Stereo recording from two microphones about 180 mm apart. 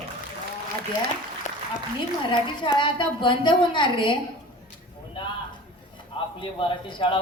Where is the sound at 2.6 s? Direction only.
25° left (ahead or behind).